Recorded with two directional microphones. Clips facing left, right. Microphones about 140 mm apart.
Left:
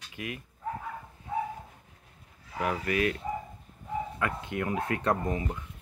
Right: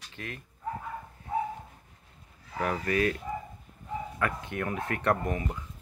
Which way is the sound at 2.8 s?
35° right (ahead or behind).